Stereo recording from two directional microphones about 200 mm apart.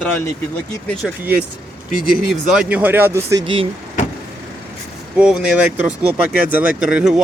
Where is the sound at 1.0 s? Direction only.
10° right (ahead or behind).